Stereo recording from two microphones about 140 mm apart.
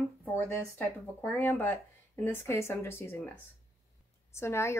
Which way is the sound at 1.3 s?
15° left (ahead or behind).